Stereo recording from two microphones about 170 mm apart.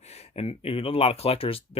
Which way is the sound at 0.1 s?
35° left (ahead or behind).